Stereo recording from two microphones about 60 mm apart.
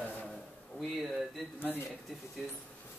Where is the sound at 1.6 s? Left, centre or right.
Left.